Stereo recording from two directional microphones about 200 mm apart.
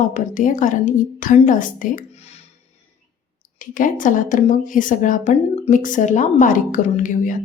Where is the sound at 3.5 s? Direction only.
40° left (ahead or behind).